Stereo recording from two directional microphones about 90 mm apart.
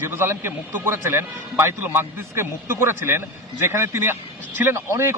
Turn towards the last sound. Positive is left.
turn(degrees=-30)  # may be behind; listen again after turning